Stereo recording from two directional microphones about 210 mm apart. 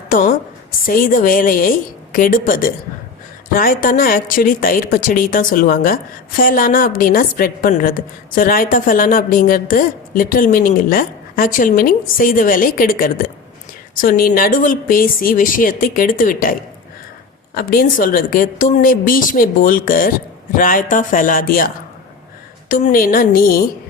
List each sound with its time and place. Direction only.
0.1 s a woman's voice: 40° left (ahead or behind)
22.7 s a woman's voice: 40° left (ahead or behind)